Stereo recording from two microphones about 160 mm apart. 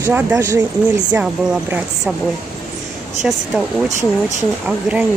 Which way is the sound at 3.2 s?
5° right (ahead or behind).